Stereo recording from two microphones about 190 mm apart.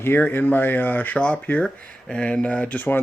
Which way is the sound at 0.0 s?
10° left (ahead or behind).